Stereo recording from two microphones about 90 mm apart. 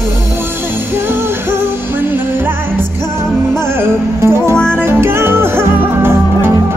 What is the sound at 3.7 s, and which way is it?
Music, 25° right (ahead or behind).